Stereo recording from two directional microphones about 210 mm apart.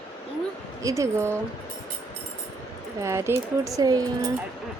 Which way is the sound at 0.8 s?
15° right (ahead or behind).